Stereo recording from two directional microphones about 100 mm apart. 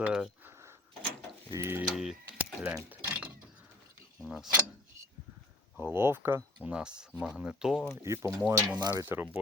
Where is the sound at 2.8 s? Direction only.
15° right (ahead or behind).